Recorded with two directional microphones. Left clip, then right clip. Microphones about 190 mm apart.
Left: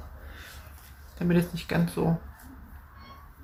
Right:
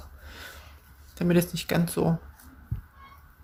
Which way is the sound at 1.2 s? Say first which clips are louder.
Right 3 dB; 55° right (ahead or behind).